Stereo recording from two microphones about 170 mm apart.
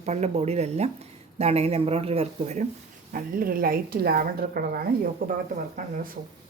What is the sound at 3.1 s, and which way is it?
Speech, 60° right (ahead or behind).